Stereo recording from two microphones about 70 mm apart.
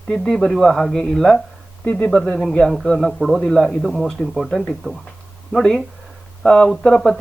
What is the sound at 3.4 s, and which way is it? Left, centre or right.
Speech, centre.